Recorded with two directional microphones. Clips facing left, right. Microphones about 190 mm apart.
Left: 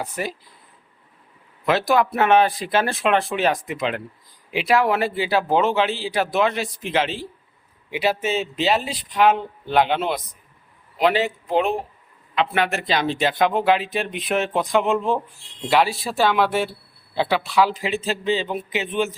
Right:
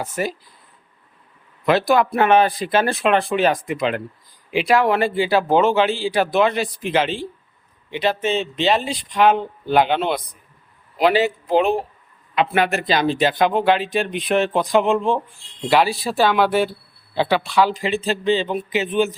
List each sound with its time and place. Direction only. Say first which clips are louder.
0.2 s speech: right 5 dB; 45° right (ahead or behind)
1.6 s a man's voice: right 2 dB; centre (ahead or behind)